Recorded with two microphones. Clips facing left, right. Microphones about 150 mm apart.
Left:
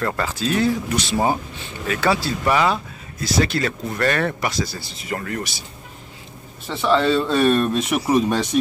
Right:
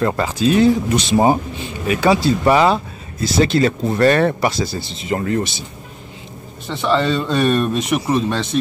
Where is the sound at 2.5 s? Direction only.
30° right (ahead or behind).